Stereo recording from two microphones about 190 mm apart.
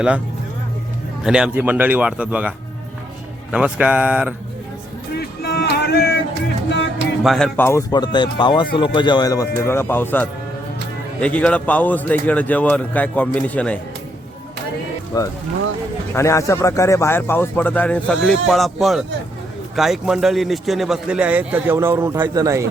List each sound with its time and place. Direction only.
1.2 s speech: 5° right (ahead or behind)
3.5 s speech: 5° right (ahead or behind)
5.1 s a sound: 60° left (ahead or behind)
7.2 s a man's voice: centre (ahead or behind)
15.1 s a man's voice: 20° left (ahead or behind); by 22.6 s 15° right (ahead or behind)